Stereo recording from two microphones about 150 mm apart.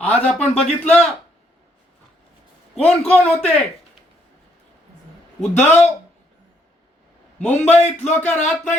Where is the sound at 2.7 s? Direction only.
10° left (ahead or behind).